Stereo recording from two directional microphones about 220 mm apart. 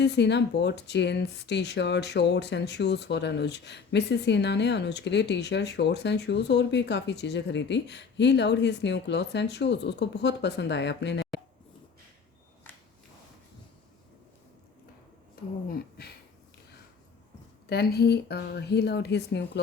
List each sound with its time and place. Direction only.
0.0 s speech: 50° left (ahead or behind)
17.7 s speech: 45° left (ahead or behind)